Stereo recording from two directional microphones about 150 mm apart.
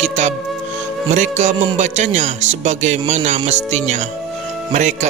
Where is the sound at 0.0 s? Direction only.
50° right (ahead or behind).